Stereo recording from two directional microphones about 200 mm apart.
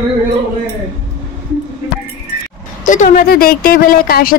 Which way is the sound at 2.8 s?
40° left (ahead or behind).